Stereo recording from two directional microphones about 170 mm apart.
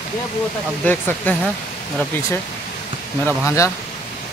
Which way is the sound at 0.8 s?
10° left (ahead or behind).